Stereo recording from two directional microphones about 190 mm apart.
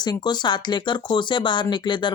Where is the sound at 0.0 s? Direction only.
20° left (ahead or behind).